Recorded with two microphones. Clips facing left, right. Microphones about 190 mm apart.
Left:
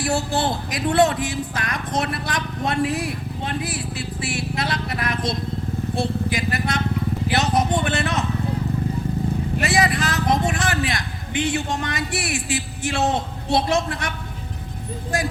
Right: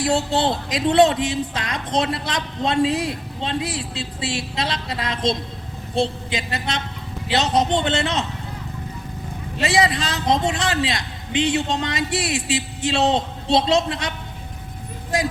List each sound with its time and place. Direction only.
0.0 s speech: 25° right (ahead or behind)
9.6 s speech: 20° right (ahead or behind)